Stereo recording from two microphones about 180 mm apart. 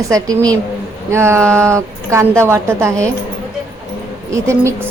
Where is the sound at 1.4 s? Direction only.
5° left (ahead or behind).